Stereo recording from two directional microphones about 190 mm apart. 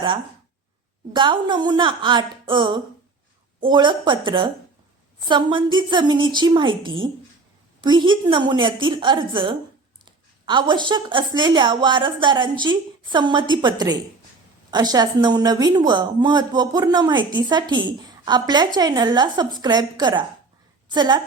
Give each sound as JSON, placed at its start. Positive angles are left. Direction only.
{"t": 1.1, "sound": "a woman's voice", "side_deg": -25}